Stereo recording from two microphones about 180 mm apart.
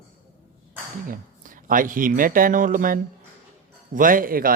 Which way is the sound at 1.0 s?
50° right (ahead or behind).